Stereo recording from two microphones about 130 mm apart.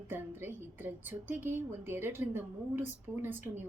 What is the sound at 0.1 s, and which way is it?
A woman's voice, 15° right (ahead or behind).